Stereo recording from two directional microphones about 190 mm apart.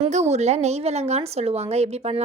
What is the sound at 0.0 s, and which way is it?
Speech, 35° right (ahead or behind).